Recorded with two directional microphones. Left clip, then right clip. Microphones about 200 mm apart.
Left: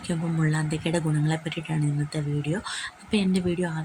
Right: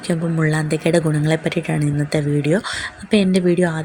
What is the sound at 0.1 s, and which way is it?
Speech, 20° right (ahead or behind).